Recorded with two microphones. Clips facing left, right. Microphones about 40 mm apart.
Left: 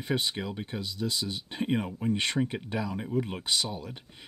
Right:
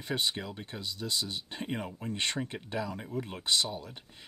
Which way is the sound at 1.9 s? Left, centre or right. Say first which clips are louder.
Left 6 dB; centre.